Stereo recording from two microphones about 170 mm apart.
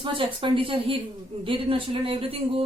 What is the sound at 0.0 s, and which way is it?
Speech, 30° right (ahead or behind).